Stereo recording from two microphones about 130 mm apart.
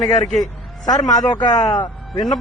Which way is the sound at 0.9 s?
30° left (ahead or behind).